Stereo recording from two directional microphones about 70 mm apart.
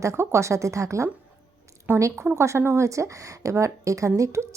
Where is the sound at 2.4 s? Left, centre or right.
Right.